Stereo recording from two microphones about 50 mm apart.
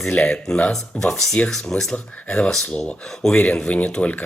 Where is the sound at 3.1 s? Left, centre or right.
Centre.